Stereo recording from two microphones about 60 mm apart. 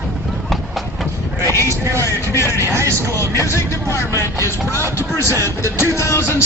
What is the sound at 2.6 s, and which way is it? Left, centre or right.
Speech, right.